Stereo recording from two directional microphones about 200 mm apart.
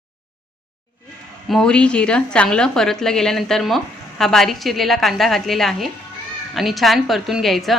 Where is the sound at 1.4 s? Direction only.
5° left (ahead or behind).